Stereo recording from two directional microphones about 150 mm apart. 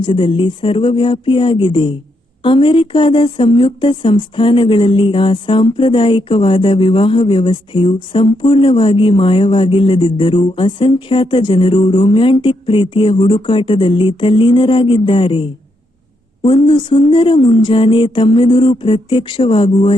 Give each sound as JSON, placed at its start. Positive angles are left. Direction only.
{"t": 0.0, "sound": "speech", "side_deg": 35}